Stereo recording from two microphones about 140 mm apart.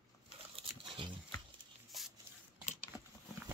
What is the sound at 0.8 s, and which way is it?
Pig, 35° right (ahead or behind).